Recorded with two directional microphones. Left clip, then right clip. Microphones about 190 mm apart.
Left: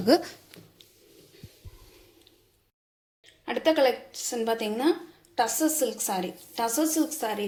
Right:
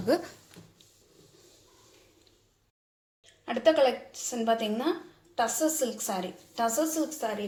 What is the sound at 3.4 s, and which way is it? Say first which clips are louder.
A woman's voice: even; 15° left (ahead or behind).